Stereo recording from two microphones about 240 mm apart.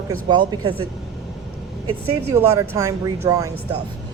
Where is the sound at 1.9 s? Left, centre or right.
Right.